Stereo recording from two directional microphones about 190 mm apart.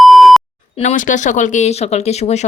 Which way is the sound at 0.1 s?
Centre (ahead or behind).